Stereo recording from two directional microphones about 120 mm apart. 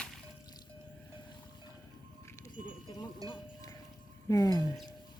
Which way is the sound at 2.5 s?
35° left (ahead or behind).